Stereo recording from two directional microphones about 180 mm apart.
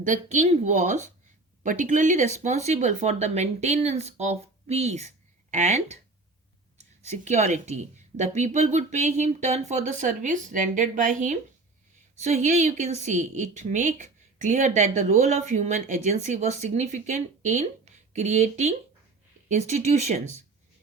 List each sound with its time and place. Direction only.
0.0 s a woman's voice: 40° right (ahead or behind)